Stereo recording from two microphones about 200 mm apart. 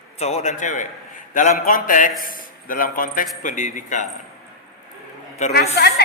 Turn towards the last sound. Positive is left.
turn(degrees=55)  # may be behind; listen again after turning